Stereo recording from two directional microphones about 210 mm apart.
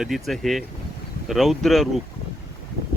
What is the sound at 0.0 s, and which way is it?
Speech, centre (ahead or behind).